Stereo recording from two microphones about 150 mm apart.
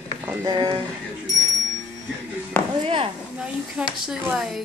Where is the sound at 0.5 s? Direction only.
30° right (ahead or behind).